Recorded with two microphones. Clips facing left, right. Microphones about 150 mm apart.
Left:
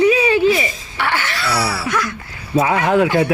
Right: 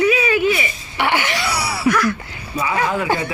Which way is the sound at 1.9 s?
20° left (ahead or behind).